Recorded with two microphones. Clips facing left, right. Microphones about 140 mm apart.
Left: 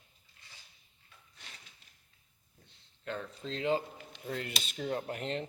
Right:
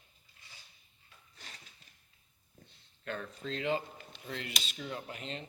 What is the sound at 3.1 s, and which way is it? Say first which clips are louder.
Speech: even; 25° left (ahead or behind).